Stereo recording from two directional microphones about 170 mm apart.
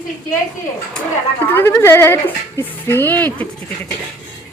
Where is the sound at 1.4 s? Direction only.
10° left (ahead or behind).